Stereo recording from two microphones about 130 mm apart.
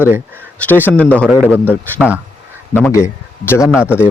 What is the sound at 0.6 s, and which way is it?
A man's voice, 15° left (ahead or behind).